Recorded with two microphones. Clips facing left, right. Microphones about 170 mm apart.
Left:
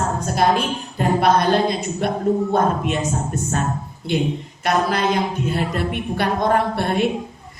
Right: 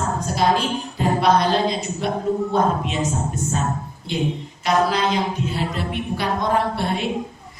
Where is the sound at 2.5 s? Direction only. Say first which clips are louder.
Left 1 dB; 55° left (ahead or behind).